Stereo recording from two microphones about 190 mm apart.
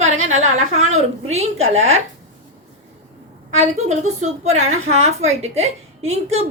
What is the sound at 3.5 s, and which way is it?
A woman's voice, 40° right (ahead or behind).